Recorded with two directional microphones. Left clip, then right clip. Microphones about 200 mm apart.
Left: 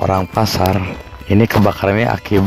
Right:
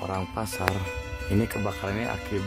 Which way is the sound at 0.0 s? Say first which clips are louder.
Left 15 dB; 30° left (ahead or behind).